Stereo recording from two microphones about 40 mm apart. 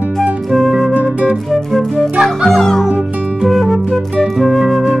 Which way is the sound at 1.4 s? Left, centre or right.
Centre.